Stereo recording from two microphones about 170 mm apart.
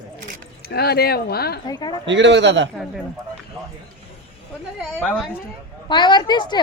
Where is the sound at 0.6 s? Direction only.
70° left (ahead or behind).